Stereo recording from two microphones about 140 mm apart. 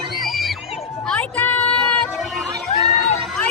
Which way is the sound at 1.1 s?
10° left (ahead or behind).